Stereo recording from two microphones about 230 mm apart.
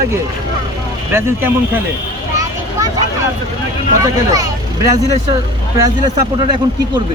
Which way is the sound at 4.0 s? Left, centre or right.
Centre.